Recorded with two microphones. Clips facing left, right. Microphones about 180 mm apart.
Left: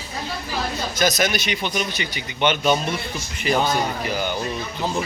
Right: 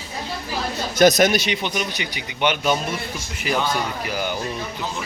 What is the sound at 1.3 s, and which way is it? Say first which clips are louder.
Speech: right 4 dB; 35° right (ahead or behind).